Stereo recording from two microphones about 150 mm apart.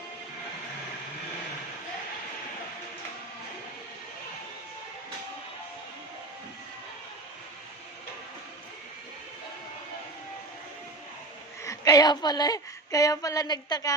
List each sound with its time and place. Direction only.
11.6 s a woman's voice: 20° left (ahead or behind)